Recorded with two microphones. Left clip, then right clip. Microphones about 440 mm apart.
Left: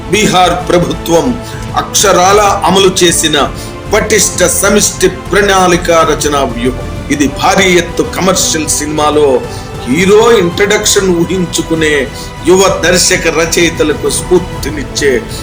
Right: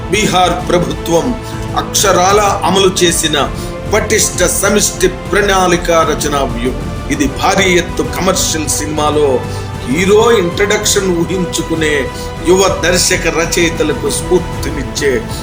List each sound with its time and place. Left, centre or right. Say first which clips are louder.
0.1 s speech: left 3 dB; right